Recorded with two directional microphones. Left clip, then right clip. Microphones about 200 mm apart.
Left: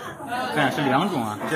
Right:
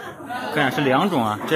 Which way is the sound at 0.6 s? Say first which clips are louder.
Right 3 dB; 25° right (ahead or behind).